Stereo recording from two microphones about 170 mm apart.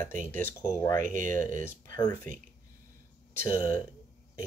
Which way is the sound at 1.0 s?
50° right (ahead or behind).